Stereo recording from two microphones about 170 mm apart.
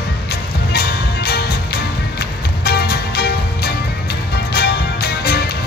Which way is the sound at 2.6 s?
70° left (ahead or behind).